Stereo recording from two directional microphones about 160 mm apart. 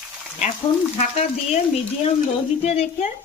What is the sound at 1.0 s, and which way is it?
Speech, 45° left (ahead or behind).